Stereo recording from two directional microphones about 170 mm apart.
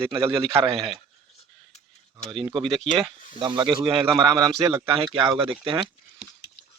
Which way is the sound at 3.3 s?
30° right (ahead or behind).